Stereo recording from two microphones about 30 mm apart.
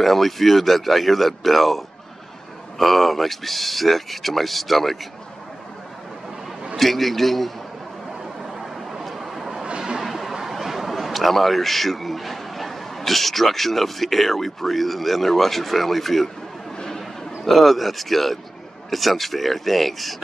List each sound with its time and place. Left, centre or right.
0.0 s speech: centre
6.8 s speech: centre
9.0 s vehicle: centre
9.7 s a sound: right
9.9 s a sound: centre
10.5 s speech: centre
17.5 s speech: centre